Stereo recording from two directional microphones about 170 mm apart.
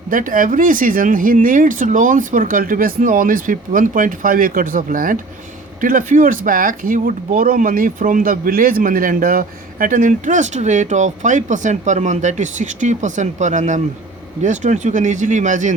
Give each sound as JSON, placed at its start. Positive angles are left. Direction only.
{"t": 0.1, "sound": "speech", "side_deg": -50}